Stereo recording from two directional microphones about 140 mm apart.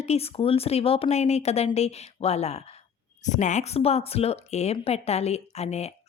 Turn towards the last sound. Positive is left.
turn(degrees=50)  # may be behind; listen again after turning